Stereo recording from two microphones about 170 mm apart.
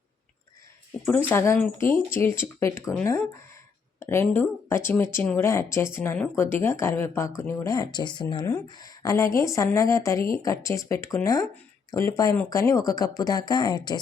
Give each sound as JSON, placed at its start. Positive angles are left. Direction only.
{"t": 1.0, "sound": "speech", "side_deg": 10}